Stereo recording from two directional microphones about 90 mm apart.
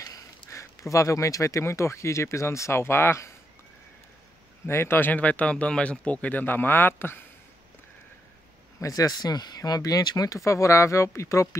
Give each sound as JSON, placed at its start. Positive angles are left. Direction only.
{"t": 0.0, "sound": "speech", "side_deg": 35}
{"t": 4.6, "sound": "speech", "side_deg": 25}
{"t": 8.7, "sound": "speech", "side_deg": 40}